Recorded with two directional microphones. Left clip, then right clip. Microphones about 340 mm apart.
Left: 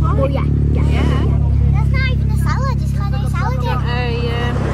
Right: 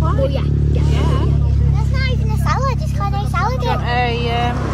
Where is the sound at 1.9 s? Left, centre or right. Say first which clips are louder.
Left 1 dB; centre.